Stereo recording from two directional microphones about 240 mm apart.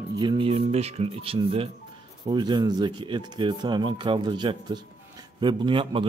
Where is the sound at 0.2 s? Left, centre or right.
Right.